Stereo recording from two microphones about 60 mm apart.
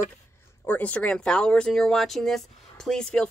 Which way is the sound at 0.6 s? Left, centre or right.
Left.